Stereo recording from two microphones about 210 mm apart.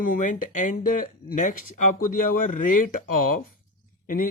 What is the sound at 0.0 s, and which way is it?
Speech, 40° left (ahead or behind).